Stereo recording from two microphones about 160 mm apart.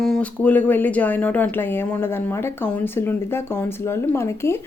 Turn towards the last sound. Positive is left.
turn(degrees=15)  # may be behind; listen again after turning